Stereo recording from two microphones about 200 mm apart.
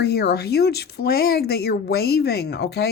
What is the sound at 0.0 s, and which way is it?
Speech, 55° left (ahead or behind).